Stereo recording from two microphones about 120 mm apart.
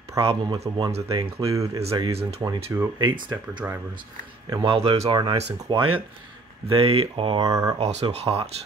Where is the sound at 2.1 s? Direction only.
55° right (ahead or behind).